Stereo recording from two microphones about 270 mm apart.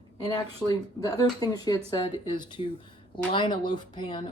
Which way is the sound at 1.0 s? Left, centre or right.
Centre.